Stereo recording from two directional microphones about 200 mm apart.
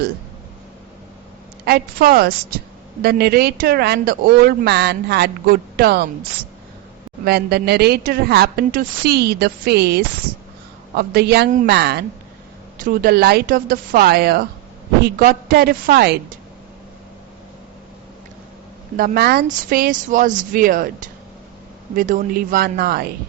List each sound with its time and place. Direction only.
1.6 s speech: 50° right (ahead or behind)
7.3 s speech: 50° right (ahead or behind)
18.9 s speech: 50° right (ahead or behind)